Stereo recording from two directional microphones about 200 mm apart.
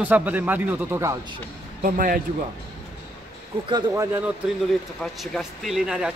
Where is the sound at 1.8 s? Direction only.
45° right (ahead or behind).